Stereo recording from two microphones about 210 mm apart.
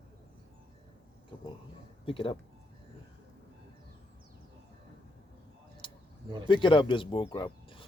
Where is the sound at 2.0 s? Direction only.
25° left (ahead or behind).